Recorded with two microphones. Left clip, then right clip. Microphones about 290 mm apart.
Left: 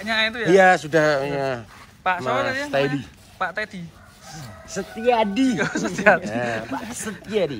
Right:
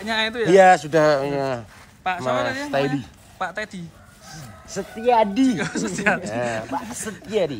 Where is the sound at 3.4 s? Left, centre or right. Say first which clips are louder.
Left 2 dB; centre.